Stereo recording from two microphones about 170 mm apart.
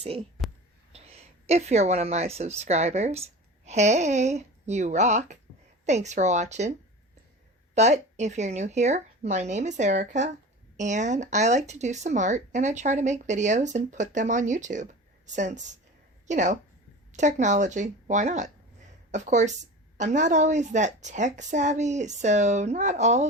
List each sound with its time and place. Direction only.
0.9 s speech: 35° right (ahead or behind)
7.8 s a woman's voice: 40° right (ahead or behind)